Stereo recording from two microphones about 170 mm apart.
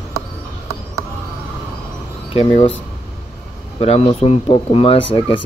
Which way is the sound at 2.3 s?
35° left (ahead or behind).